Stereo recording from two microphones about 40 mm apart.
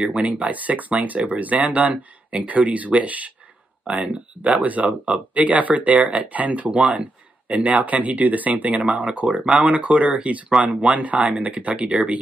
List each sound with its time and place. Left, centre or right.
0.0 s speech: right
6.7 s speech: right